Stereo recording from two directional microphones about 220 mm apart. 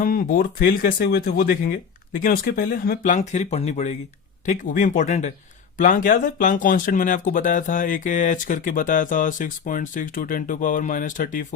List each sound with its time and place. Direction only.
0.0 s speech: 40° left (ahead or behind)